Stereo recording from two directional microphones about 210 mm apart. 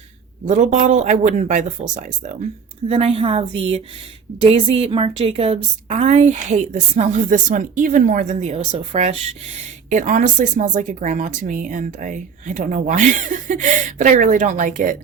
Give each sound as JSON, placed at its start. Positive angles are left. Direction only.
{"t": 0.4, "sound": "a woman's voice", "side_deg": -35}